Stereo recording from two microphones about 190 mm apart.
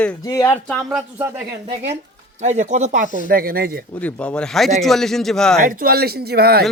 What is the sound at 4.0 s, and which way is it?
Speech, 5° left (ahead or behind).